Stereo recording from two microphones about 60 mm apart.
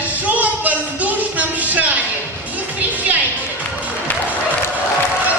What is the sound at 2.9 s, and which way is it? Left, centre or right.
Music, right.